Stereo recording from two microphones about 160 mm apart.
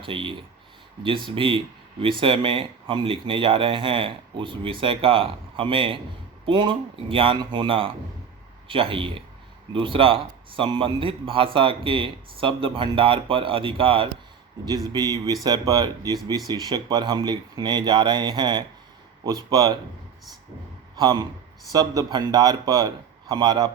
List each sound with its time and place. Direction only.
0.0 s speech: 30° right (ahead or behind)
21.0 s speech: 20° right (ahead or behind)